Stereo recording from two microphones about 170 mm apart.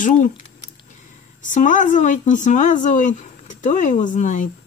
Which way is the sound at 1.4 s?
50° left (ahead or behind).